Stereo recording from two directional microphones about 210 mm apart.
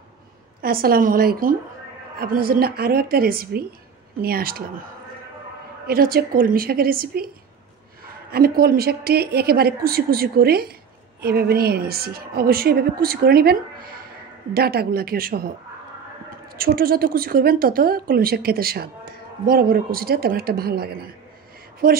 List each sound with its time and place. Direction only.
0.6 s a woman's voice: 45° right (ahead or behind)
5.9 s a woman's voice: 45° right (ahead or behind)
8.3 s a woman's voice: 45° right (ahead or behind)
16.5 s a woman's voice: 45° right (ahead or behind)